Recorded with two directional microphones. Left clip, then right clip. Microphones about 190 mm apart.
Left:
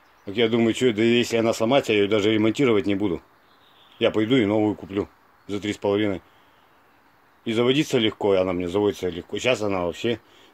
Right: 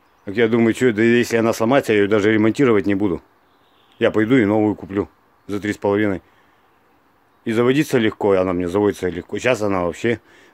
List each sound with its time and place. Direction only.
0.2 s speech: 15° right (ahead or behind)
7.4 s speech: 15° right (ahead or behind)